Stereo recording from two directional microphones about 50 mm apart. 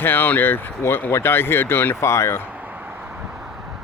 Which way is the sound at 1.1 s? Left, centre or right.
Left.